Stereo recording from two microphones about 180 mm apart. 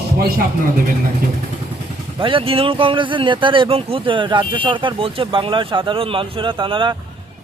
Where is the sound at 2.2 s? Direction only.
30° right (ahead or behind).